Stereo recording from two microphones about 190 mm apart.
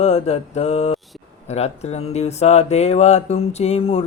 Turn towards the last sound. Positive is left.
turn(degrees=30)  # may be behind; listen again after turning